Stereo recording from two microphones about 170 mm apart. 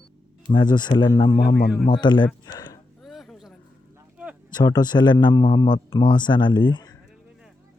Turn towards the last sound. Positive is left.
turn(degrees=25)  # may be behind; listen again after turning